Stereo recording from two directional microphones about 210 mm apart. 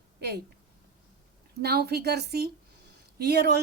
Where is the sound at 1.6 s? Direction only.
50° right (ahead or behind).